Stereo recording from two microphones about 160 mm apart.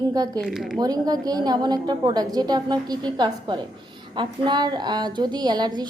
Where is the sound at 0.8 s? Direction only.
25° right (ahead or behind).